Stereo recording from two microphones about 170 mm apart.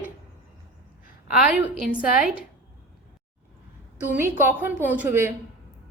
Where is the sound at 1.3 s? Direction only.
5° right (ahead or behind).